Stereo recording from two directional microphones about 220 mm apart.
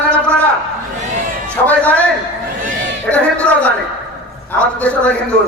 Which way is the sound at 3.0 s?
5° left (ahead or behind).